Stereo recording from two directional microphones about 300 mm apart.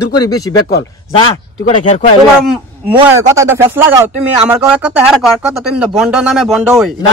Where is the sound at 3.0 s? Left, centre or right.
Centre.